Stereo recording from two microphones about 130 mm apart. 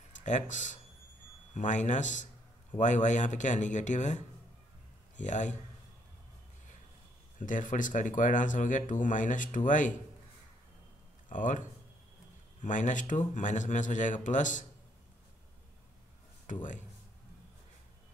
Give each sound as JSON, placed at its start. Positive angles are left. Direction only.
{"t": 0.1, "sound": "speech", "side_deg": 70}
{"t": 7.3, "sound": "speech", "side_deg": 85}
{"t": 11.2, "sound": "speech", "side_deg": 85}
{"t": 12.6, "sound": "speech", "side_deg": 75}
{"t": 16.5, "sound": "speech", "side_deg": 80}